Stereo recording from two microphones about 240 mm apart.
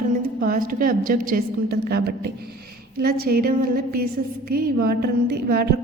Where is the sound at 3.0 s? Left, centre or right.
Right.